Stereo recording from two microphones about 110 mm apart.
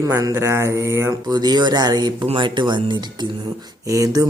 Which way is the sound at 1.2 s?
40° right (ahead or behind).